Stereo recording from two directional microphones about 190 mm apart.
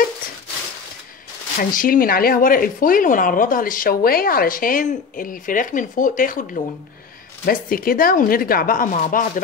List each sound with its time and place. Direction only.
1.8 s speech: 50° left (ahead or behind)